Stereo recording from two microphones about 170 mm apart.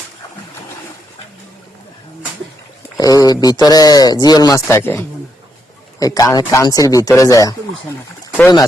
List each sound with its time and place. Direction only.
3.0 s speech: 20° left (ahead or behind)